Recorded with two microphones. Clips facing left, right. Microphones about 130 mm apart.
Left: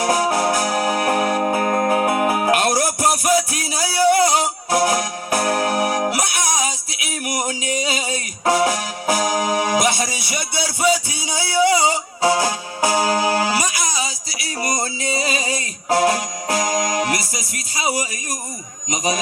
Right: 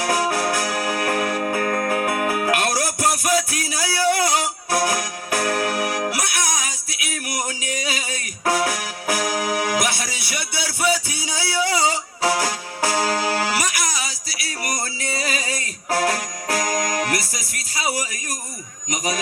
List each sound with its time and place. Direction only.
0.0 s music: 20° left (ahead or behind)
18.9 s a man's voice: 20° left (ahead or behind)